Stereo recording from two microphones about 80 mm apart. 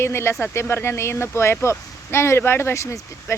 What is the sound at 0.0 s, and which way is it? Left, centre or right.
Speech, left.